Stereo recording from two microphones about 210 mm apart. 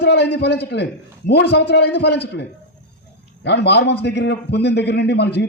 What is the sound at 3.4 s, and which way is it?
A man's voice, 55° left (ahead or behind).